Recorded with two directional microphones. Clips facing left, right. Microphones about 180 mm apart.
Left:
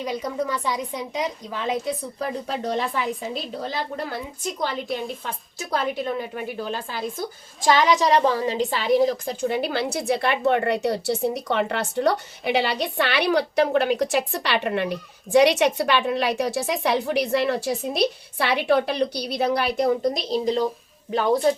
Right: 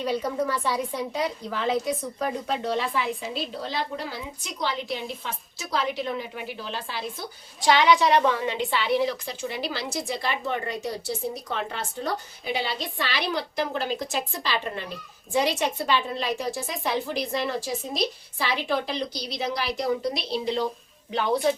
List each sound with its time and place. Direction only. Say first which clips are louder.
0.0 s speech: even; 15° left (ahead or behind)
2.5 s a woman's voice: left 2 dB; 45° left (ahead or behind)